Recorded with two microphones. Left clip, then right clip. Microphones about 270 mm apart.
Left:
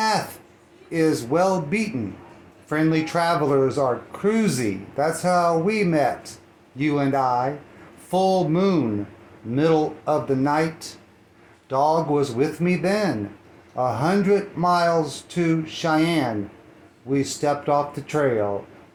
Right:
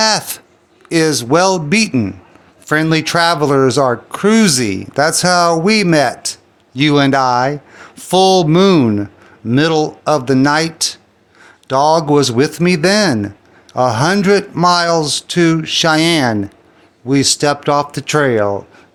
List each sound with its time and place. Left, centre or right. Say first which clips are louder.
0.9 s speech: right 8 dB; right